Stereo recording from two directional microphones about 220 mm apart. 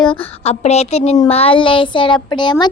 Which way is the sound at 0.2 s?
25° left (ahead or behind).